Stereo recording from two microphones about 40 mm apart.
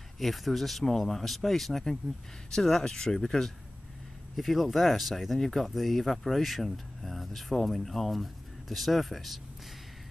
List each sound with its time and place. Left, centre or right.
0.2 s speech: centre
4.4 s speech: centre